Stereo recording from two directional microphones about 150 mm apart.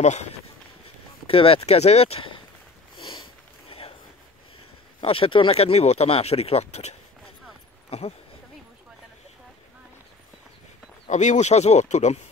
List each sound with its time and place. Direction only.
0.0 s speech: 50° left (ahead or behind)
1.2 s speech: 40° left (ahead or behind)
3.0 s sniff: 30° left (ahead or behind)
5.0 s speech: 35° left (ahead or behind)
11.1 s speech: 55° left (ahead or behind)